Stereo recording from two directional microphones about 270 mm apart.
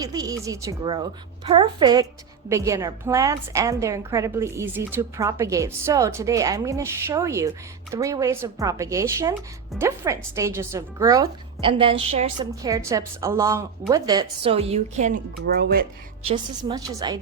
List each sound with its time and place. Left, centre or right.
0.0 s a woman's voice: centre; by 15.9 s right
16.2 s a woman's voice: centre